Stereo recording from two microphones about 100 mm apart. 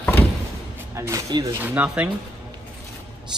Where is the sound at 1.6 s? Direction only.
15° right (ahead or behind).